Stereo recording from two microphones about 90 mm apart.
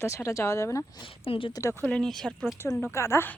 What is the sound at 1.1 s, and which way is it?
Speech, 85° left.